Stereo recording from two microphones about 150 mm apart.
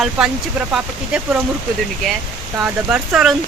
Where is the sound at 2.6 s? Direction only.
5° right (ahead or behind).